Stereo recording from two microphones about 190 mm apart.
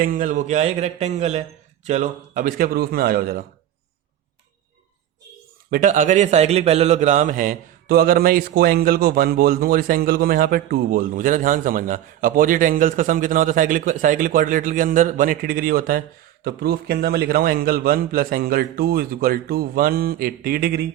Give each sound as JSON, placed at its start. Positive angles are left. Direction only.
{"t": 0.0, "sound": "a man's voice", "side_deg": -45}
{"t": 5.7, "sound": "a man's voice", "side_deg": -45}